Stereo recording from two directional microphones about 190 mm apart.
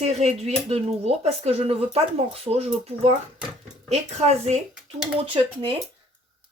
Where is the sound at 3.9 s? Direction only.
35° right (ahead or behind).